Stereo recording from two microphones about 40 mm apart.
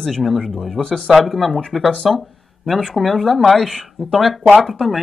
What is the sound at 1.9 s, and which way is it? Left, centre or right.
Speech, centre.